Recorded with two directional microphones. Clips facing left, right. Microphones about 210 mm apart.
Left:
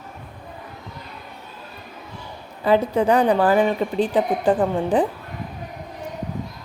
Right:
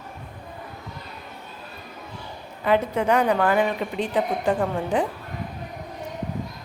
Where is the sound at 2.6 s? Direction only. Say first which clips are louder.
Left 3 dB; 35° left (ahead or behind).